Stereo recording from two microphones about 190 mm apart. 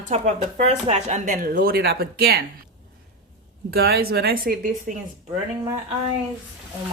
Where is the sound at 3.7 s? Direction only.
55° right (ahead or behind).